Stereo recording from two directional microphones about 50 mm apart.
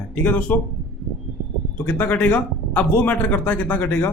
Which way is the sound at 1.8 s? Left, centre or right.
Left.